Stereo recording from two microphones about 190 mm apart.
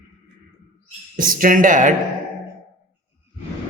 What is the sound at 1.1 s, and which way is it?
Speech, 45° right (ahead or behind).